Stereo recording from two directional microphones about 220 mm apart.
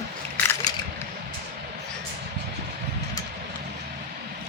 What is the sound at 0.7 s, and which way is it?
Crushing, 15° left (ahead or behind).